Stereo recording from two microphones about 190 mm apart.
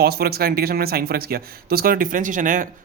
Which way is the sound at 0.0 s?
55° right (ahead or behind).